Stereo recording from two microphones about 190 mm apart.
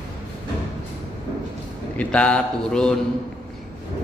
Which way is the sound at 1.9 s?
5° left (ahead or behind).